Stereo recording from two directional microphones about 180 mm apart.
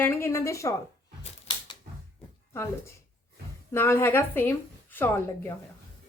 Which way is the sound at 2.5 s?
15° left (ahead or behind).